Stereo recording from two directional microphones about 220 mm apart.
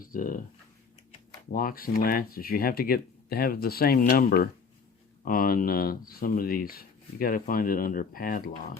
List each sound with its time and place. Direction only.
0.0 s speech: 40° left (ahead or behind)
1.5 s speech: 40° left (ahead or behind)